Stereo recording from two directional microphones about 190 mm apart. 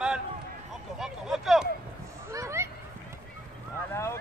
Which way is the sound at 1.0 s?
Centre (ahead or behind).